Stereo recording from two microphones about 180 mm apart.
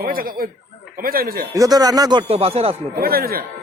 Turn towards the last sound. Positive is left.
turn(degrees=-55)  # may be behind; listen again after turning